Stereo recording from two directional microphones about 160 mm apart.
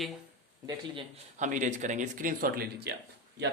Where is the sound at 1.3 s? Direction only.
50° right (ahead or behind).